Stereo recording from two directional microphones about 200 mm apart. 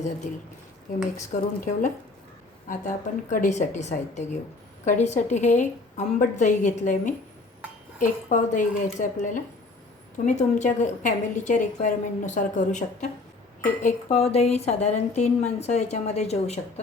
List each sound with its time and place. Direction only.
0.9 s a woman's voice: 40° left (ahead or behind)